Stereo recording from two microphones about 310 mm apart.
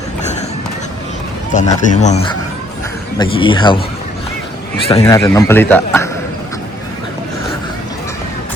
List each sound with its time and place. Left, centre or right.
1.5 s speech: left
4.9 s speech: centre